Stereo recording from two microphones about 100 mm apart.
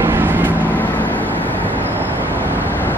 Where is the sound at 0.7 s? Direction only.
20° left (ahead or behind).